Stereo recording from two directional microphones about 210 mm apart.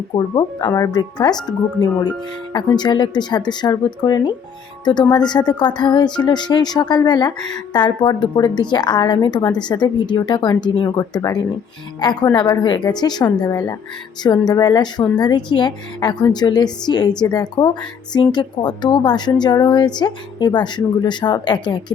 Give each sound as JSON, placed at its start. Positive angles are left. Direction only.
{"t": 0.1, "sound": "speech", "side_deg": 20}